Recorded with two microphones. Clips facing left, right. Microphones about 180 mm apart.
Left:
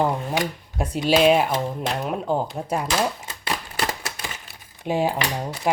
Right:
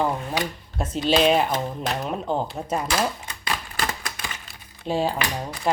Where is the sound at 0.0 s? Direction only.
15° left (ahead or behind).